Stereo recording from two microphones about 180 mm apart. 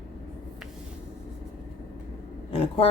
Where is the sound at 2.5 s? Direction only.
30° left (ahead or behind).